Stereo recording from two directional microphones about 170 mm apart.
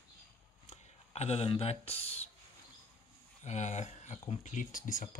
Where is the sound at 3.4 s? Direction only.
45° left (ahead or behind).